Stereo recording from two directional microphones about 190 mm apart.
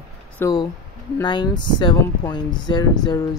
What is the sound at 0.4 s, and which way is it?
Speech, 20° left (ahead or behind).